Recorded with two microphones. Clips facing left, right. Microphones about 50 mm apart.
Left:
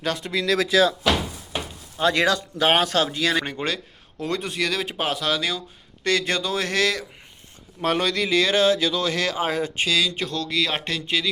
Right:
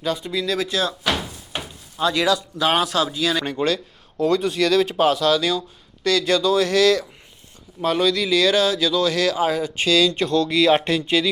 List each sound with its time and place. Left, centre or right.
0.0 s speech: left
2.0 s speech: left
3.5 s speech: left
7.8 s speech: left
9.7 s speech: centre
10.2 s speech: centre